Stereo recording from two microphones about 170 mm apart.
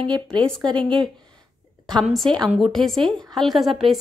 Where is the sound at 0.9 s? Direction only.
30° right (ahead or behind).